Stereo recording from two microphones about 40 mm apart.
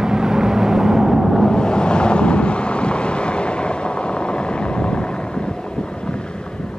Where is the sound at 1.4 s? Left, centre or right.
Centre.